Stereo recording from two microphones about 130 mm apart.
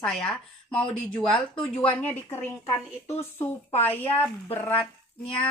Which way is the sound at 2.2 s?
20° left (ahead or behind).